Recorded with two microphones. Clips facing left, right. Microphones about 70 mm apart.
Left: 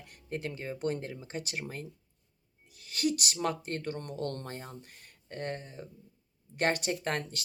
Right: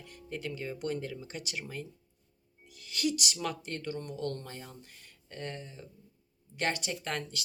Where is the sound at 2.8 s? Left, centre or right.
Left.